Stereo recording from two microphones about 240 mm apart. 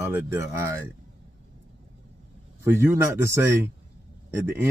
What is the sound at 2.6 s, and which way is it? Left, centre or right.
Speech, centre.